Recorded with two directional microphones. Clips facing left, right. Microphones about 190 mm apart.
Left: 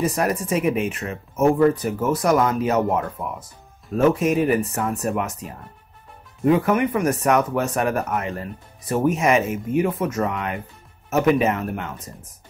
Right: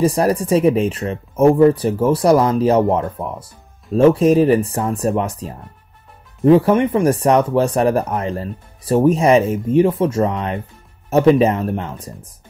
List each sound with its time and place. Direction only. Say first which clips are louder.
0.0 s speech: right 6 dB; 30° right (ahead or behind)